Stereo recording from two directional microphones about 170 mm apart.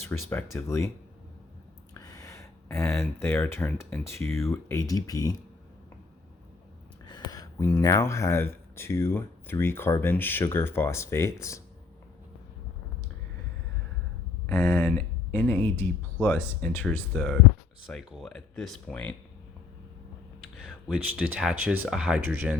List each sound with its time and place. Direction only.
0.1 s speech: 10° left (ahead or behind)
1.9 s speech: 20° left (ahead or behind)
7.1 s speech: 25° left (ahead or behind)
14.4 s speech: 15° left (ahead or behind)
20.6 s speech: centre (ahead or behind)